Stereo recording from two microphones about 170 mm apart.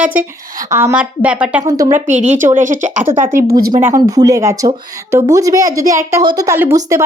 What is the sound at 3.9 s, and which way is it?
A woman's voice, 20° right (ahead or behind).